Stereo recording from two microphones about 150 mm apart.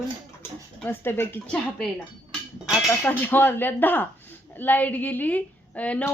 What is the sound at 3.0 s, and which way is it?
A woman's voice, 15° left (ahead or behind).